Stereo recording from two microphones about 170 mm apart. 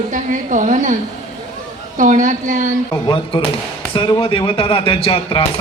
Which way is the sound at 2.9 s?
30° left (ahead or behind).